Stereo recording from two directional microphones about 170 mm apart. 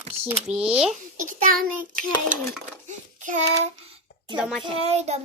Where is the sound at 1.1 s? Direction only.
55° right (ahead or behind).